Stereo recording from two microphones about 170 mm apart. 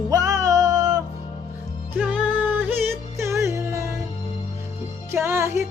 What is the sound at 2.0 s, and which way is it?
Music, 5° right (ahead or behind).